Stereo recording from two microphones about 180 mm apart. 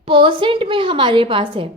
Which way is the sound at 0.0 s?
30° right (ahead or behind).